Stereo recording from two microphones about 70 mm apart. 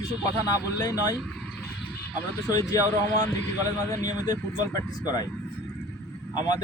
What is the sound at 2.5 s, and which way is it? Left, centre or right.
Speech, left.